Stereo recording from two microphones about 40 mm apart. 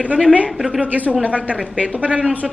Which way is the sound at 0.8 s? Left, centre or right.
Right.